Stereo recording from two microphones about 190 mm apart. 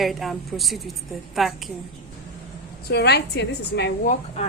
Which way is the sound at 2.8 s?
60° left (ahead or behind).